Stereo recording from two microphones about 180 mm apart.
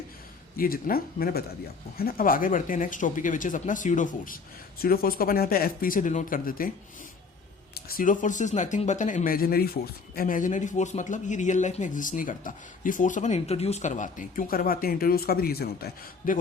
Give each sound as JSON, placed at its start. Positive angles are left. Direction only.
{"t": 0.5, "sound": "speech", "side_deg": 55}
{"t": 4.8, "sound": "speech", "side_deg": 55}
{"t": 7.9, "sound": "speech", "side_deg": 50}